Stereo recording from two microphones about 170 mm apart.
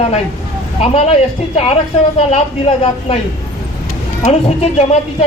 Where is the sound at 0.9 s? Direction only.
35° left (ahead or behind).